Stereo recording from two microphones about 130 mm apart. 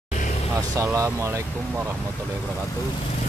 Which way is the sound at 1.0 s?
25° right (ahead or behind).